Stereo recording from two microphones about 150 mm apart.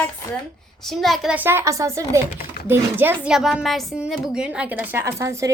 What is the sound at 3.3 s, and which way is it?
A woman's voice, centre (ahead or behind).